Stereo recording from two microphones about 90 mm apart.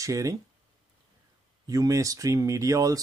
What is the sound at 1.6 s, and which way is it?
Speech, 40° right (ahead or behind).